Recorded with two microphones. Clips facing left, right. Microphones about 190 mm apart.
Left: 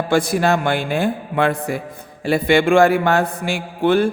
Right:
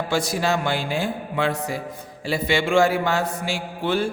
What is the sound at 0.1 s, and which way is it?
A man's voice, 55° left (ahead or behind).